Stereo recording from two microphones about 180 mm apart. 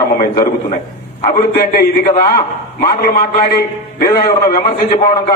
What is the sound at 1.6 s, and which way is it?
A man's voice, 55° left (ahead or behind).